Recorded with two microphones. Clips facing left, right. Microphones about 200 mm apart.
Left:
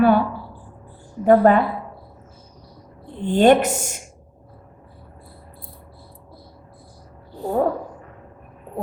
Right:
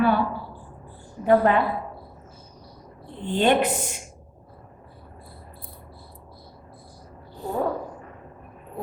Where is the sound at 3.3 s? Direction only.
45° left (ahead or behind).